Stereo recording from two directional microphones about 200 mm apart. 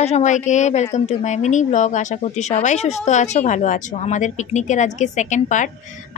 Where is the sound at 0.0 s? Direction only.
35° left (ahead or behind).